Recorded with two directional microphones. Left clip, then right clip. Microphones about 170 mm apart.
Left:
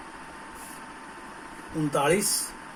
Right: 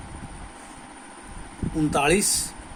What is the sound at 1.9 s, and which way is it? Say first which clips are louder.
Speech: right 2 dB; 50° right (ahead or behind).